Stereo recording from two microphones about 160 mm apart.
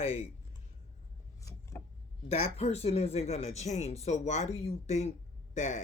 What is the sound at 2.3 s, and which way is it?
Speech, 40° left (ahead or behind).